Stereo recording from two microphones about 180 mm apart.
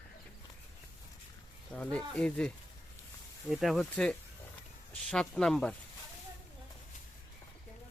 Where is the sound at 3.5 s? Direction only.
Centre (ahead or behind).